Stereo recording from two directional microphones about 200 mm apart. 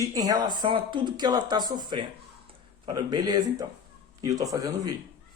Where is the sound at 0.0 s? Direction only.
20° right (ahead or behind).